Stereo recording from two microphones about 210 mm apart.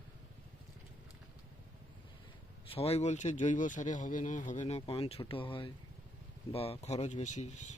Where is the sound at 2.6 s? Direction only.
30° left (ahead or behind).